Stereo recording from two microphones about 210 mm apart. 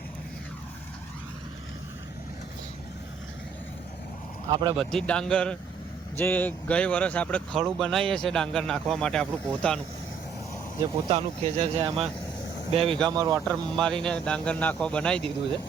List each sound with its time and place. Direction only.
4.4 s speech: 20° right (ahead or behind)
4.8 s speech: centre (ahead or behind)
11.1 s speech: 30° right (ahead or behind)
13.7 s speech: 5° left (ahead or behind)